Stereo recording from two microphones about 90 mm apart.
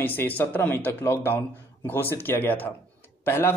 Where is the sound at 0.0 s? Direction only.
20° left (ahead or behind).